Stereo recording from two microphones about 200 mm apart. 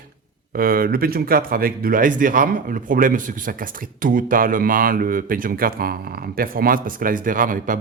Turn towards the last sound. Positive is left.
turn(degrees=-45)  # may be behind; listen again after turning